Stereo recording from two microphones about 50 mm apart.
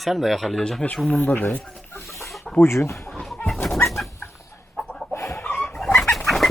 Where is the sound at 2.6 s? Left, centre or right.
Left.